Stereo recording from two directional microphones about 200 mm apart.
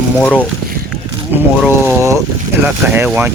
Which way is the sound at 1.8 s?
10° right (ahead or behind).